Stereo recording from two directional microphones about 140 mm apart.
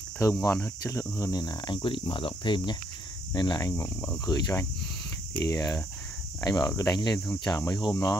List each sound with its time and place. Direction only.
0.2 s speech: 25° left (ahead or behind)